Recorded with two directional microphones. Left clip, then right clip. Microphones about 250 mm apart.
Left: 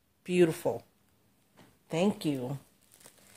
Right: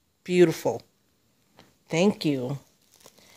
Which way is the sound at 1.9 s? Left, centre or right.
Right.